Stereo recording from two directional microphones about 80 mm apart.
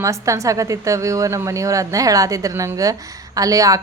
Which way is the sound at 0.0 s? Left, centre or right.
Right.